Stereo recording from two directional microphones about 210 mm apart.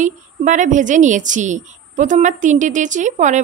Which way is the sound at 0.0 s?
35° right (ahead or behind).